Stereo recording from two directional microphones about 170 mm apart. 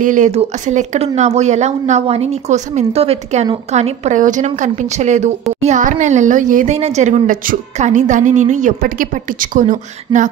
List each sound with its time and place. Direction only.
0.0 s a woman's voice: 50° right (ahead or behind)